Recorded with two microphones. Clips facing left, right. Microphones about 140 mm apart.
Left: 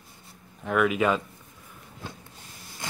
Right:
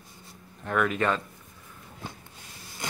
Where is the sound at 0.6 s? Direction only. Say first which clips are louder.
Left 3 dB; 5° left (ahead or behind).